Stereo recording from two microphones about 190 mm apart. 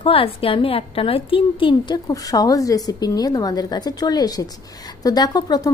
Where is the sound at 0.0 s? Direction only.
30° left (ahead or behind).